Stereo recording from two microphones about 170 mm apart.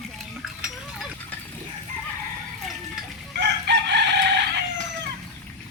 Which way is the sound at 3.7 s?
90° right.